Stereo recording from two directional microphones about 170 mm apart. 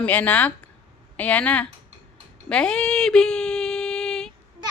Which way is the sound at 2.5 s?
5° left (ahead or behind).